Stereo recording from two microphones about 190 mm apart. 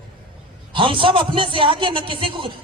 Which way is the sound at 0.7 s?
25° right (ahead or behind).